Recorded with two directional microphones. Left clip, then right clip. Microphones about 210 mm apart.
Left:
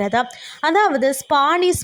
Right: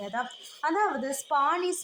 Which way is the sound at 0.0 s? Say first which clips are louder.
Left 13 dB; 35° left (ahead or behind).